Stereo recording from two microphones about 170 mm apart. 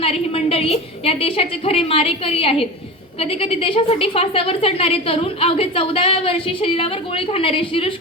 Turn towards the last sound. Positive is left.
turn(degrees=30)  # may be behind; listen again after turning